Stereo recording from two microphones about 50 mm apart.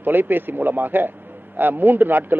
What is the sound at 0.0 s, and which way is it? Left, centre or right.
Speech, right.